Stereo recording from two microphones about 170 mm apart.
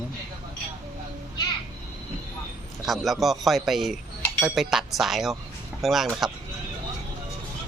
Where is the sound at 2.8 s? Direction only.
Centre (ahead or behind).